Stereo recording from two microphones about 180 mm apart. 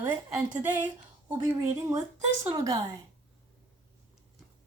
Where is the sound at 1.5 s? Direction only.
15° right (ahead or behind).